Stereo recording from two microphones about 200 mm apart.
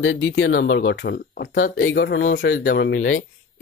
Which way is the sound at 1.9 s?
65° left (ahead or behind).